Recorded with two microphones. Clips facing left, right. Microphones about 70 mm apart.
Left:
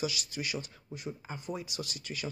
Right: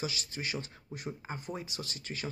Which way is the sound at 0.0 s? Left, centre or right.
Right.